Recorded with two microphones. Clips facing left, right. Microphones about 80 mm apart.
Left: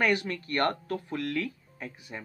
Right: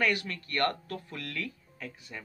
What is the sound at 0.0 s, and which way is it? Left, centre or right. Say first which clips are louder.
Speech: left 3 dB; left.